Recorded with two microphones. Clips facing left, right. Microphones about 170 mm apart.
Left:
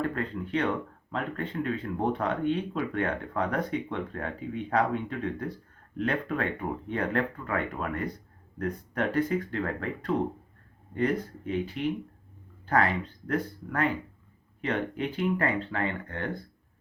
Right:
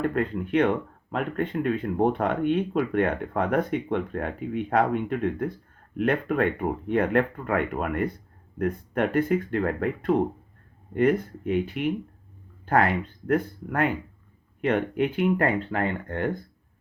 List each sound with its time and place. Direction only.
0.1 s speech: 55° right (ahead or behind)